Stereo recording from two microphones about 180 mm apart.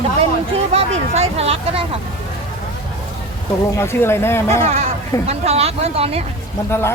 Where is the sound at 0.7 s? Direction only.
35° right (ahead or behind).